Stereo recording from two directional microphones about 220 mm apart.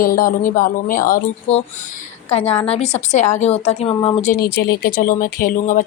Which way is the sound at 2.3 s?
30° left (ahead or behind).